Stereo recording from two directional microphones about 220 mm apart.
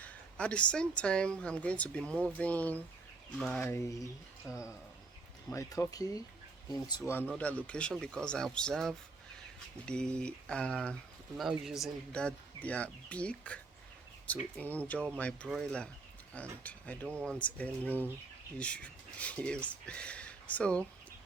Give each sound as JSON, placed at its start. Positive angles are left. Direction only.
{"t": 0.0, "sound": "speech", "side_deg": 5}